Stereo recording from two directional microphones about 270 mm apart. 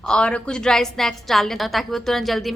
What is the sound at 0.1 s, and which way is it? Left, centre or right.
A woman's voice, centre.